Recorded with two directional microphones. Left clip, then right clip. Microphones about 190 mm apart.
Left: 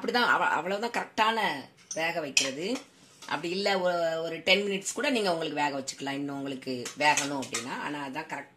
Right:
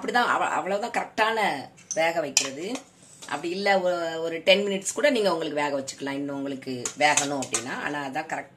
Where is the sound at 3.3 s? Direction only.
35° left (ahead or behind).